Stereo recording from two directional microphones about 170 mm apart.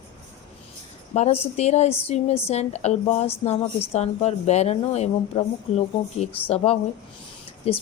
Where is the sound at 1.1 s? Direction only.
40° left (ahead or behind).